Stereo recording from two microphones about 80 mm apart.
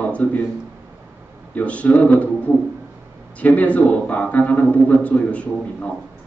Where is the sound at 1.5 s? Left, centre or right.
Centre.